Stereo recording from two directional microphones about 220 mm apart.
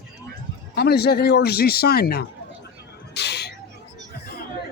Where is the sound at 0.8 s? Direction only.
45° left (ahead or behind).